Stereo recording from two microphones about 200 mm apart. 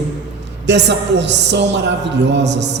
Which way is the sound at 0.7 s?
60° right (ahead or behind).